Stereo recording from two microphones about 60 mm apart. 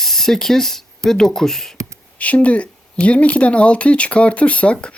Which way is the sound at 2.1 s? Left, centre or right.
Left.